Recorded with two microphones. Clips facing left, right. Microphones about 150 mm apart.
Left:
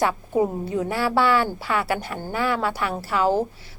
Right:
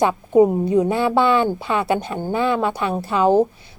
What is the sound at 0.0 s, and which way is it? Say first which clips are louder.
A woman's voice: right 7 dB; 20° right (ahead or behind).